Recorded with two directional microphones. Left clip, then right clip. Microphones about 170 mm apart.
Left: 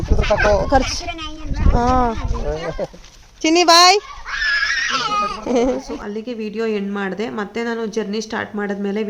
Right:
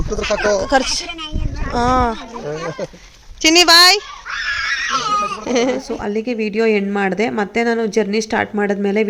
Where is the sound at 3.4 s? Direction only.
5° left (ahead or behind).